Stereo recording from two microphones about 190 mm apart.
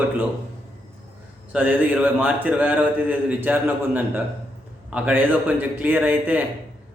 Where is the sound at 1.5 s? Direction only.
10° right (ahead or behind).